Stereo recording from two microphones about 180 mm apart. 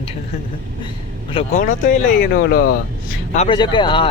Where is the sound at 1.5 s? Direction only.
50° left (ahead or behind).